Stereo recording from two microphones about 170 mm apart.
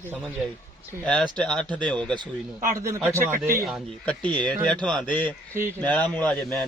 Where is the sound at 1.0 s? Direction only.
5° left (ahead or behind).